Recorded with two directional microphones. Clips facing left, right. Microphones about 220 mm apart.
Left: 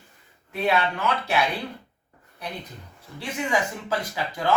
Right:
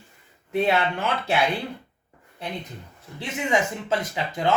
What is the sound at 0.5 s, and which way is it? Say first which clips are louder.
Speech: right 2 dB; 25° right (ahead or behind).